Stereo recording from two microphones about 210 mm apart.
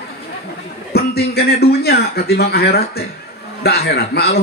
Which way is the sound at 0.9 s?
50° left (ahead or behind).